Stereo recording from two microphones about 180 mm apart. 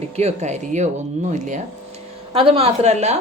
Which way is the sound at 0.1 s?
35° right (ahead or behind).